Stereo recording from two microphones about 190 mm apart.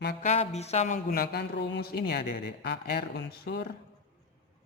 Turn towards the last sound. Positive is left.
turn(degrees=60)  # may be behind; listen again after turning